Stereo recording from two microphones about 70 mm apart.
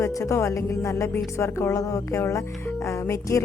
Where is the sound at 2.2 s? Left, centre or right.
Left.